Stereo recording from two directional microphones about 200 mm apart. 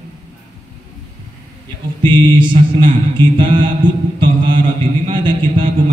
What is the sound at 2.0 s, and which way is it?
Mantra, 25° right (ahead or behind).